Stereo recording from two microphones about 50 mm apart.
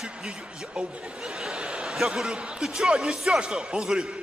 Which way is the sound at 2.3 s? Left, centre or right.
Centre.